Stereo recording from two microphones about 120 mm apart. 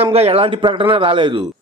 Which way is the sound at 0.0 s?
55° right (ahead or behind).